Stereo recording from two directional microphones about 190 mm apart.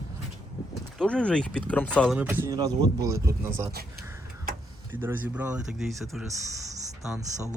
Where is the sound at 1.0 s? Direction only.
5° left (ahead or behind).